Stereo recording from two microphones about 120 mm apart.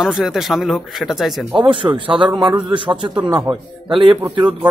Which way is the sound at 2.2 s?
40° right (ahead or behind).